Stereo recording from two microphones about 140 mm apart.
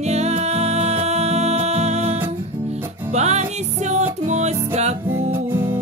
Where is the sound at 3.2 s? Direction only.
50° right (ahead or behind).